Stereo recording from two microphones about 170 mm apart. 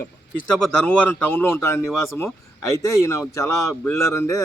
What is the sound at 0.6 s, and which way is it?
Speech, 5° left (ahead or behind).